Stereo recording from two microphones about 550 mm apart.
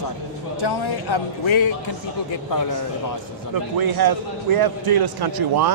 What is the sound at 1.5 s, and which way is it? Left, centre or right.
Speech, left.